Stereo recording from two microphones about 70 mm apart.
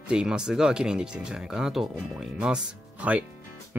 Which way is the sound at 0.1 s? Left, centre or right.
Centre.